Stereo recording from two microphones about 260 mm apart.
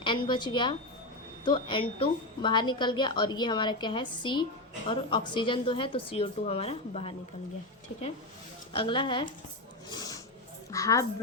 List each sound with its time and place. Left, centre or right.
0.0 s a woman's voice: centre
8.7 s a woman's voice: centre
10.7 s a woman's voice: centre